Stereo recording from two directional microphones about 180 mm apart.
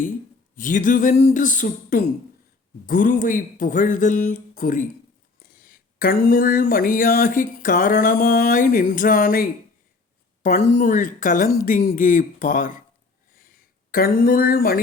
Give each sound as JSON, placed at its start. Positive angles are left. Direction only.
{"t": 0.5, "sound": "speech", "side_deg": 45}
{"t": 10.8, "sound": "speech", "side_deg": 45}
{"t": 13.4, "sound": "a sound", "side_deg": 55}